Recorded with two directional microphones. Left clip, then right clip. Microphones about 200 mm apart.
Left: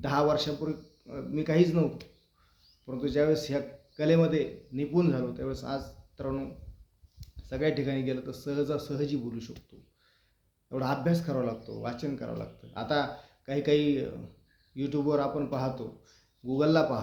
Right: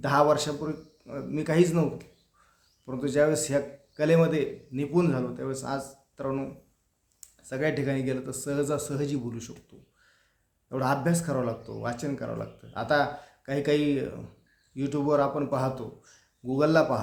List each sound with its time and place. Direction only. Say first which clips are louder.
0.0 s a man's voice: right 4 dB; 15° right (ahead or behind)
9.7 s speech: right 2 dB; 25° right (ahead or behind)
10.7 s a man's voice: right 3 dB; 15° right (ahead or behind)